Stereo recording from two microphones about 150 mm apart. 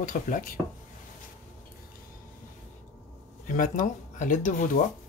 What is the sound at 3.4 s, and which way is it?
Speech, 65° left (ahead or behind).